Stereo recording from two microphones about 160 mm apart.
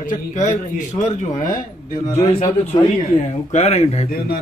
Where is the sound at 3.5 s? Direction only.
40° left (ahead or behind).